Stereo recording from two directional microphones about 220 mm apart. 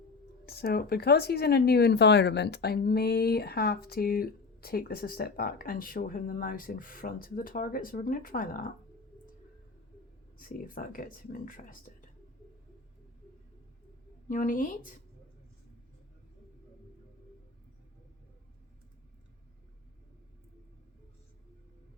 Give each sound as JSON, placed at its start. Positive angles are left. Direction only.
{"t": 0.4, "sound": "speech", "side_deg": 45}
{"t": 10.3, "sound": "speech", "side_deg": 40}
{"t": 14.3, "sound": "speech", "side_deg": 35}